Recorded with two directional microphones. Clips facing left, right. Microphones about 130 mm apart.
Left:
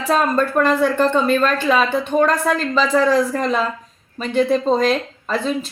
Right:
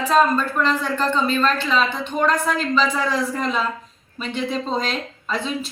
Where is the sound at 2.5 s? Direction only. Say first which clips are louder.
Left 4 dB; 40° left (ahead or behind).